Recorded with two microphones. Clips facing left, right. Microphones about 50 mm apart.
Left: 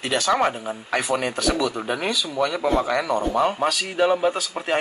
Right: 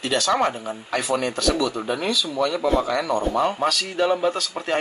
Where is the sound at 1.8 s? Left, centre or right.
Left.